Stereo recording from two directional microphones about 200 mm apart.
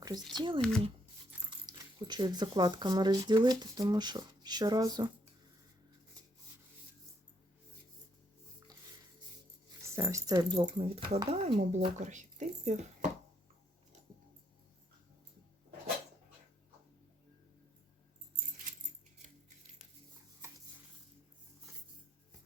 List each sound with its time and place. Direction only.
0.3 s speech: 25° right (ahead or behind)
9.8 s speech: 15° right (ahead or behind); by 13.1 s 35° right (ahead or behind)